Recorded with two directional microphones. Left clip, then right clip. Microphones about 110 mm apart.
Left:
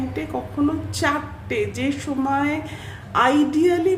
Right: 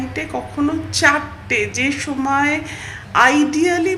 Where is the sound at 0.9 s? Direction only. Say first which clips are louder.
Right 12 dB; 25° left (ahead or behind).